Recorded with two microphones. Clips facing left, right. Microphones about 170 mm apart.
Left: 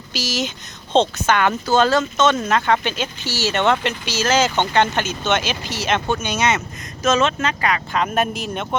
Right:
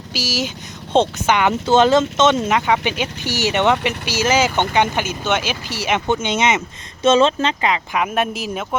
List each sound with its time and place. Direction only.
0.1 s speech: 10° right (ahead or behind)
7.9 s speech: 5° right (ahead or behind)